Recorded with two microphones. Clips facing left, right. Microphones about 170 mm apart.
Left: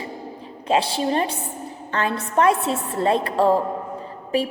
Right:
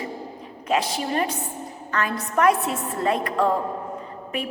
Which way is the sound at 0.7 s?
30° left (ahead or behind).